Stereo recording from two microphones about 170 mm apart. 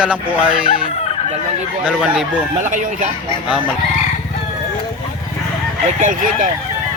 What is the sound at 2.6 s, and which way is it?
Speech, 45° right (ahead or behind).